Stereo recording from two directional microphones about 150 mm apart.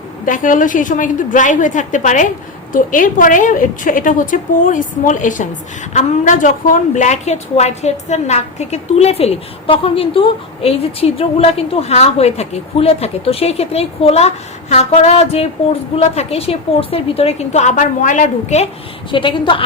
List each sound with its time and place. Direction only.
0.3 s a woman's voice: 60° left (ahead or behind)
19.1 s a woman's voice: 35° left (ahead or behind)